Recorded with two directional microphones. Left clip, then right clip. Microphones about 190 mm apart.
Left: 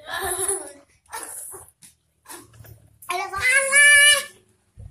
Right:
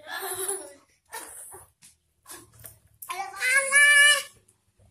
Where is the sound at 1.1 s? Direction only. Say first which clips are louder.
Left 5 dB; centre (ahead or behind).